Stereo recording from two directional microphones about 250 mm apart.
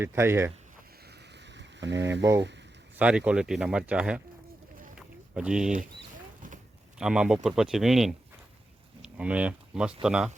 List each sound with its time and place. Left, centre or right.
0.0 s speech: centre
1.5 s boat: right
3.0 s speech: centre
4.9 s rowboat: centre
7.0 s speech: centre